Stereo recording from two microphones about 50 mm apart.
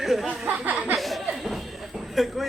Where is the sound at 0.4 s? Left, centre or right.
Right.